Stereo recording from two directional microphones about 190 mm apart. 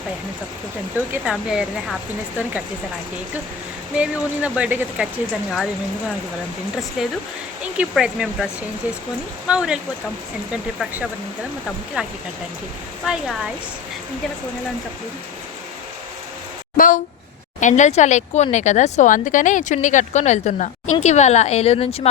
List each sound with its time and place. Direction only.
1.1 s speech: 5° right (ahead or behind)
3.9 s speech: 5° right (ahead or behind)
7.0 s speech: centre (ahead or behind)
9.5 s speech: 5° right (ahead or behind)
12.0 s speech: 5° right (ahead or behind)
16.7 s speech: 45° left (ahead or behind)